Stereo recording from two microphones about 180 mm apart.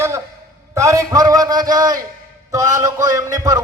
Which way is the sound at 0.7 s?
15° right (ahead or behind).